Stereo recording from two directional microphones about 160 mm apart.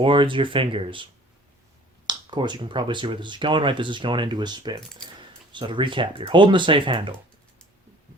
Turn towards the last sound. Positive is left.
turn(degrees=-30)  # may be behind; listen again after turning